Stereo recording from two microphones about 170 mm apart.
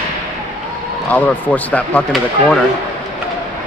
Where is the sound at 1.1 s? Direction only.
10° left (ahead or behind).